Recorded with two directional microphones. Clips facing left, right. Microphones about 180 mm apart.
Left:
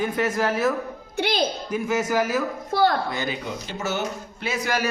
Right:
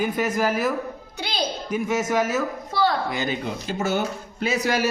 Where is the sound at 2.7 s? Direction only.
50° left (ahead or behind).